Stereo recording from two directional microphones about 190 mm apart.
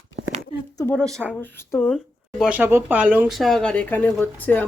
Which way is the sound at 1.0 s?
15° right (ahead or behind).